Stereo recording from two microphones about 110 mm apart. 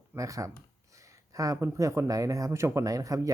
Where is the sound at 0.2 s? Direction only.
30° right (ahead or behind).